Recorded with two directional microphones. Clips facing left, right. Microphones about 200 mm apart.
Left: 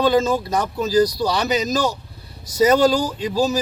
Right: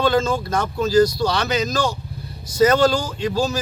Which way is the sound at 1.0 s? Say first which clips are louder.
Even; 40° left (ahead or behind).